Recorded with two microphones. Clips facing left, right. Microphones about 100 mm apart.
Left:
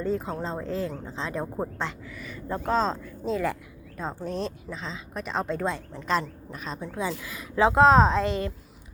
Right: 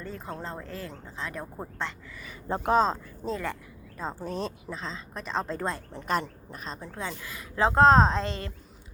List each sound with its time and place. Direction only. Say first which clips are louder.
0.0 s speech: left 8 dB; 20° left (ahead or behind)
2.1 s a woman's voice: left 5 dB; centre (ahead or behind)
2.5 s a woman's voice: right 2 dB; 15° right (ahead or behind)
6.1 s a woman's voice: left 2 dB; 50° right (ahead or behind)
6.7 s a woman's voice: left 4 dB; 5° left (ahead or behind)
6.9 s a woman's voice: left 7 dB; 15° left (ahead or behind)
8.3 s a woman's voice: left 7 dB; 20° left (ahead or behind)